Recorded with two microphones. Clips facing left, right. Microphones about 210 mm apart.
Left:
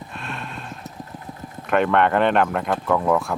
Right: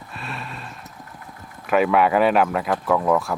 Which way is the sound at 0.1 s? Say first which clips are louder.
Right 2 dB; centre (ahead or behind).